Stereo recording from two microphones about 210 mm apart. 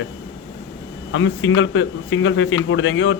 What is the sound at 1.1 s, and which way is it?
A man's voice, 70° left (ahead or behind).